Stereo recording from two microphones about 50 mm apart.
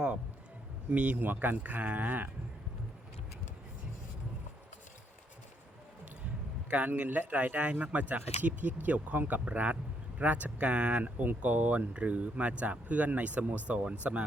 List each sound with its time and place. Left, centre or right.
0.9 s speech: right
1.2 s speech: right
6.7 s speech: right